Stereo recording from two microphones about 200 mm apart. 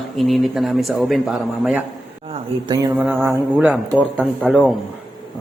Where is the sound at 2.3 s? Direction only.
20° right (ahead or behind).